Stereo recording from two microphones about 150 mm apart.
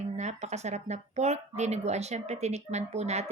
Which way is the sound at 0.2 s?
50° right (ahead or behind).